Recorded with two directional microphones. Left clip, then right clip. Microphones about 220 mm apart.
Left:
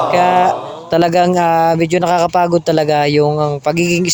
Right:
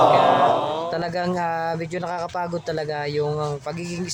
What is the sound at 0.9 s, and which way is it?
Speech, 40° left (ahead or behind).